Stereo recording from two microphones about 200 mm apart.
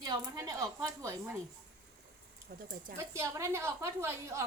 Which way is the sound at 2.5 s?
50° right (ahead or behind).